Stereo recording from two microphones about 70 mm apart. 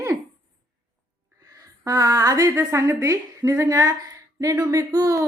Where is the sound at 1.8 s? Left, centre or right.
Right.